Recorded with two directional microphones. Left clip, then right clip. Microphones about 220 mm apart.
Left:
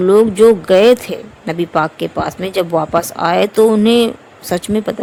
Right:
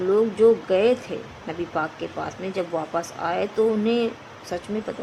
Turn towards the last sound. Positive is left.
turn(degrees=45)  # may be behind; listen again after turning